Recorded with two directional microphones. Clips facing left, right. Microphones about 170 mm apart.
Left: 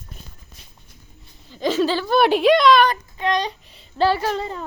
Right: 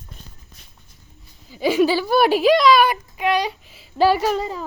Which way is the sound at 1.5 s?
10° right (ahead or behind).